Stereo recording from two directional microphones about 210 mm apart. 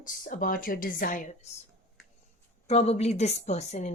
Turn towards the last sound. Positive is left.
turn(degrees=30)  # may be behind; listen again after turning